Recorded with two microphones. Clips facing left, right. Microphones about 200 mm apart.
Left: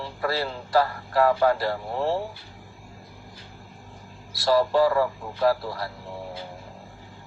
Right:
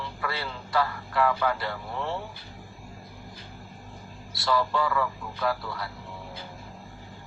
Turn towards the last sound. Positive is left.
turn(degrees=35)  # may be behind; listen again after turning